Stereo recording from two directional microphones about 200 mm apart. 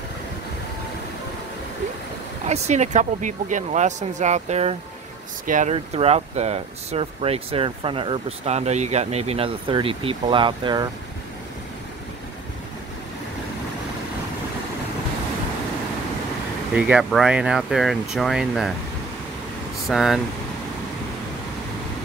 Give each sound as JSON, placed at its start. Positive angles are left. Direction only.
{"t": 2.4, "sound": "speech", "side_deg": -35}
{"t": 16.7, "sound": "speech", "side_deg": -5}
{"t": 19.9, "sound": "speech", "side_deg": 0}